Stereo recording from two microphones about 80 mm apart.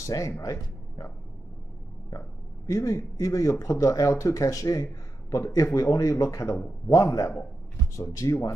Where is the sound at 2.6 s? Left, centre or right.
Left.